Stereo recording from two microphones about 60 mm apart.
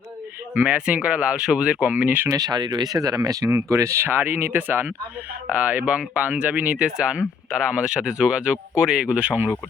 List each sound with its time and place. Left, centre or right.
0.5 s speech: right
2.3 s speech: right
3.7 s speech: right
4.0 s speech: right
5.5 s speech: right